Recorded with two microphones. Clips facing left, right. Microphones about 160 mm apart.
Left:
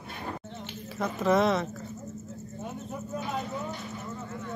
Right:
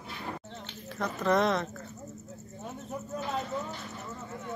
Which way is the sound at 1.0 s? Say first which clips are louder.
Left 2 dB; 5° left (ahead or behind).